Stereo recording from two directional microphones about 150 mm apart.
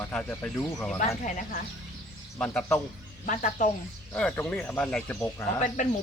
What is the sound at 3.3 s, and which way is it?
Speech, 55° left (ahead or behind).